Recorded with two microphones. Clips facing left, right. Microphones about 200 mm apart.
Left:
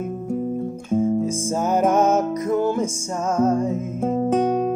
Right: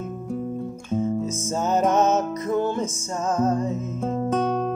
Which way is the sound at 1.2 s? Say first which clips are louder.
Left 3 dB; 10° left (ahead or behind).